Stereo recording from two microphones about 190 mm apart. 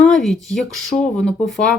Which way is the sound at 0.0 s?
Centre (ahead or behind).